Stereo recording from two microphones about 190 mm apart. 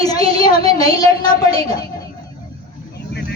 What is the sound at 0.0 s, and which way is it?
Child singing, 20° left (ahead or behind).